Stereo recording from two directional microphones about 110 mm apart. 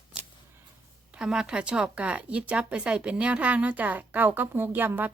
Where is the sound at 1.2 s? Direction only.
5° right (ahead or behind).